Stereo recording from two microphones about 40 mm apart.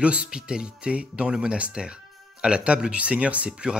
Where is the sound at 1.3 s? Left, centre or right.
Right.